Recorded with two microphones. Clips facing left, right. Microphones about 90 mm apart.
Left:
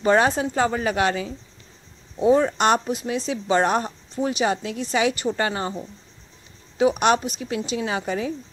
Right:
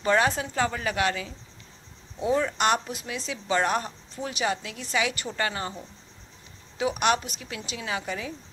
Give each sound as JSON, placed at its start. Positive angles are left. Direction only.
{"t": 0.0, "sound": "speech", "side_deg": 30}
{"t": 6.8, "sound": "a woman's voice", "side_deg": 30}